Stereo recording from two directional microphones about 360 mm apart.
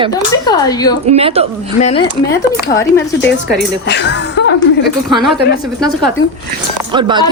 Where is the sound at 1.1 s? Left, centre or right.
Centre.